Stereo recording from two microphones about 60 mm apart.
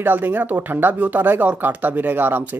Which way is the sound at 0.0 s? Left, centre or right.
Right.